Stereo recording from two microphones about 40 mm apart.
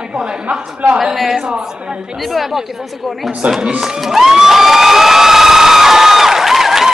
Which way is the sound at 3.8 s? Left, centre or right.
Centre.